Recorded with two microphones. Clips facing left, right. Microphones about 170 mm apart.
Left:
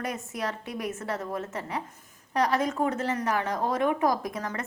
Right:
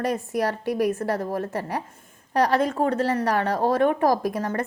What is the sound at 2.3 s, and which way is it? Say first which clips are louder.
Speech: right 5 dB; 65° right (ahead or behind).